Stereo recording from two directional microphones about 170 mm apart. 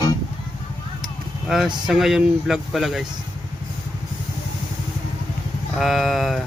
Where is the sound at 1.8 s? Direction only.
Centre (ahead or behind).